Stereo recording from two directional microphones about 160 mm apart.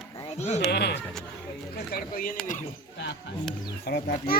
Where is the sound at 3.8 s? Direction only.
80° left.